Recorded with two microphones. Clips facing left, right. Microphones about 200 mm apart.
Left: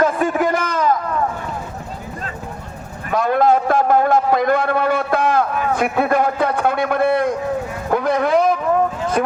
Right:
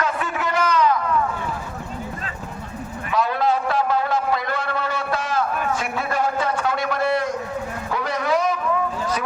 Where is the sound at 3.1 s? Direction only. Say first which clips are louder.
Left 6 dB; 50° left (ahead or behind).